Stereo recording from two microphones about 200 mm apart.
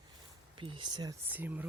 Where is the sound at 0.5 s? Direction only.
25° right (ahead or behind); by 1.6 s 10° right (ahead or behind).